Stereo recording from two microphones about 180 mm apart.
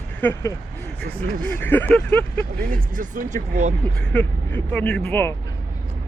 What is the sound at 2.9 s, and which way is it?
Speech, 45° right (ahead or behind).